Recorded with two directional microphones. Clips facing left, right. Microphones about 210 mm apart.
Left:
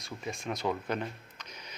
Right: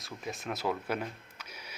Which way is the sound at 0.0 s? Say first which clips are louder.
Left 1 dB; centre (ahead or behind).